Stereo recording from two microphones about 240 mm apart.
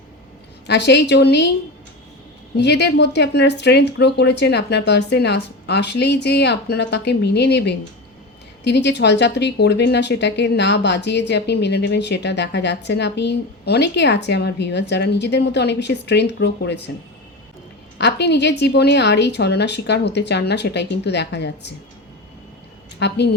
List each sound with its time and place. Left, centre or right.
0.7 s speech: left
2.6 s speech: left
17.9 s speech: left
23.0 s speech: left